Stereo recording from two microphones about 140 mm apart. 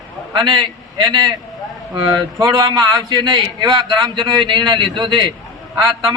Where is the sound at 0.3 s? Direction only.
35° right (ahead or behind).